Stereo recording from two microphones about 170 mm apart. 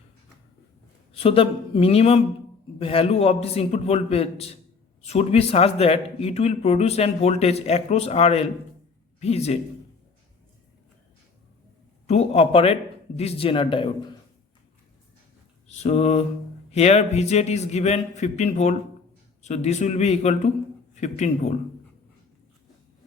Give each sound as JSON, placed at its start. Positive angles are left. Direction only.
{"t": 1.2, "sound": "speech", "side_deg": 35}
{"t": 12.0, "sound": "speech", "side_deg": 40}
{"t": 15.6, "sound": "a sound", "side_deg": 40}
{"t": 16.7, "sound": "speech", "side_deg": 40}